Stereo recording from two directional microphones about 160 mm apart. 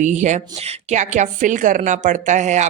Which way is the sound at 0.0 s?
50° right (ahead or behind).